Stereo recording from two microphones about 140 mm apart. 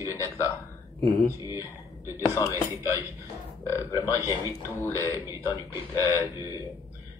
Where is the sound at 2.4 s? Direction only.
25° left (ahead or behind).